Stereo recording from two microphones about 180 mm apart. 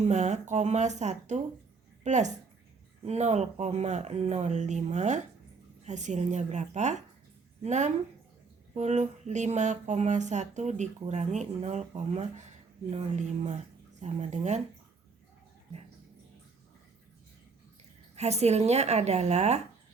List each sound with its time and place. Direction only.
0.1 s speech: 40° right (ahead or behind)
18.1 s speech: 35° right (ahead or behind)